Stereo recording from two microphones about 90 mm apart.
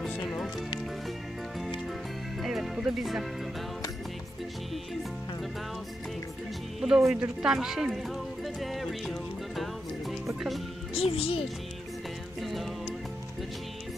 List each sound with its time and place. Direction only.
0.3 s music: 5° left (ahead or behind)
2.4 s music: centre (ahead or behind)
6.8 s speech: 5° right (ahead or behind)
11.0 s a child's voice: 90° left
12.4 s music: centre (ahead or behind)